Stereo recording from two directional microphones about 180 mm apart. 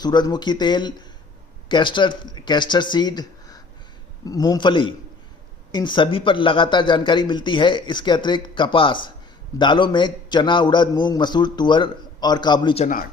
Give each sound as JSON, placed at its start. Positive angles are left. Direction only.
{"t": 0.0, "sound": "speech", "side_deg": 25}